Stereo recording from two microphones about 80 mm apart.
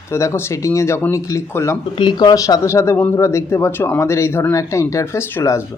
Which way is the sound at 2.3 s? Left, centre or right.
Left.